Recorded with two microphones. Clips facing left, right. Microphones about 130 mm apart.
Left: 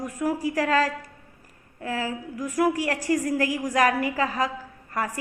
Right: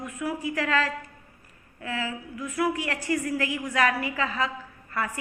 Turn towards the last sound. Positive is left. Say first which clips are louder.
# left 2 dB
turn(degrees=40)  # may be behind; listen again after turning